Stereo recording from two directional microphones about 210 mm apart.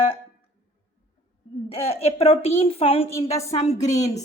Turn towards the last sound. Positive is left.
turn(degrees=30)  # may be behind; listen again after turning